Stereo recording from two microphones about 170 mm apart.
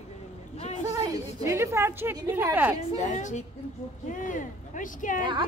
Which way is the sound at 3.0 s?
45° left (ahead or behind).